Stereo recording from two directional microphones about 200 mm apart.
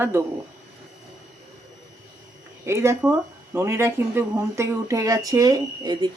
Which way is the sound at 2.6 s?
15° right (ahead or behind).